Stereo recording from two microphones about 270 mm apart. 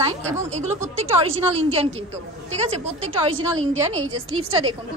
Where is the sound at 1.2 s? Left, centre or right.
Right.